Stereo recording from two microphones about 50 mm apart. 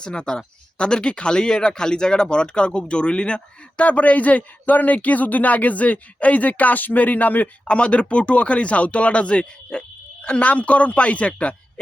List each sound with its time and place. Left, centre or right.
0.0 s speech: centre; by 7.5 s left
7.6 s speech: left
9.7 s a sound: centre
10.2 s speech: left